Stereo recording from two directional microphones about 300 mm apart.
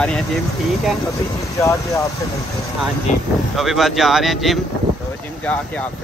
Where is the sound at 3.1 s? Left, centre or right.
Left.